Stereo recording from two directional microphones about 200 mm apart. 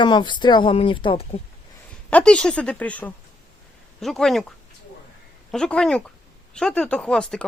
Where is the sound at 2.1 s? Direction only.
5° left (ahead or behind).